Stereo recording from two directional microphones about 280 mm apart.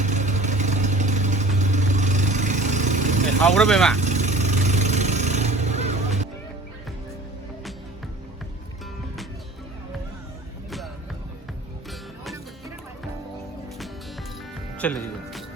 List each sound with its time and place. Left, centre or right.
0.0 s vehicle: right
3.4 s speech: centre
3.9 s vehicle: right
11.9 s music: centre
14.8 s music: centre